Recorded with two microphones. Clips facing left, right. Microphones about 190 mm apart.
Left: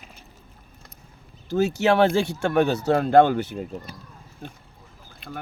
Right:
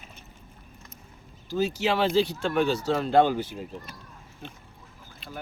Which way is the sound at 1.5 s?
60° left (ahead or behind).